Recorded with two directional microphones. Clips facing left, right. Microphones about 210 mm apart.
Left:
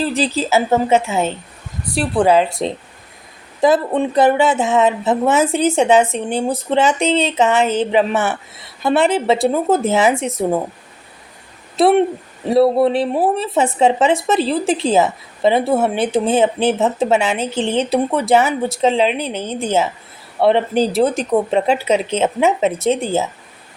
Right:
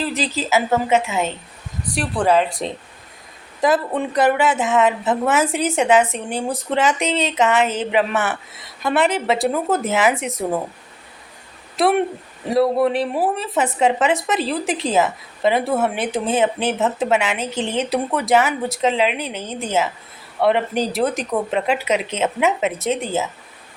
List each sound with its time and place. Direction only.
0.0 s speech: 30° left (ahead or behind)
11.8 s speech: 25° left (ahead or behind)